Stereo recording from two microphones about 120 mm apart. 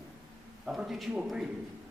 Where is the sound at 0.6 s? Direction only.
5° right (ahead or behind).